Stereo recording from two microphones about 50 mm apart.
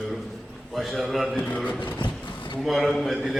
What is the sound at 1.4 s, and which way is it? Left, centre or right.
Speech, left.